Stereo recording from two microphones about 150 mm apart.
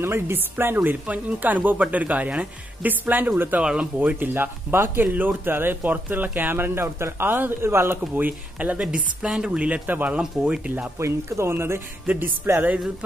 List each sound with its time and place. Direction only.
0.0 s speech: 15° right (ahead or behind)
11.0 s speech: 20° right (ahead or behind)